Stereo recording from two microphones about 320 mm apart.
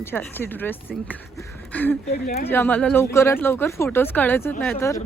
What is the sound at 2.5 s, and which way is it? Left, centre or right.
Speech, centre.